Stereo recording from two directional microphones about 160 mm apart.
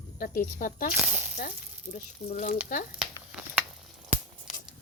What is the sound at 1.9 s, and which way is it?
Speech, 55° left (ahead or behind).